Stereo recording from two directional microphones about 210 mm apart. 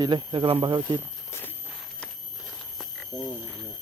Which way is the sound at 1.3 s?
10° left (ahead or behind).